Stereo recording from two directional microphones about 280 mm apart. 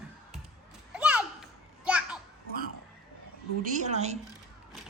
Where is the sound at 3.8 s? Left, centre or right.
Right.